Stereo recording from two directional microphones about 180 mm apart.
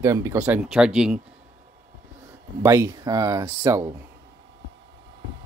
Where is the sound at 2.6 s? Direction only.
20° right (ahead or behind).